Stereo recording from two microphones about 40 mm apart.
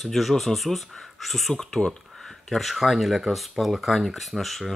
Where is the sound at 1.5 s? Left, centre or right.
Centre.